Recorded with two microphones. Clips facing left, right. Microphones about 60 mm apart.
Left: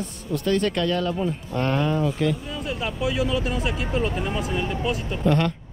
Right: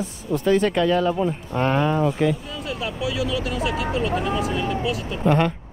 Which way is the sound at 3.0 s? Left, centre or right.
Left.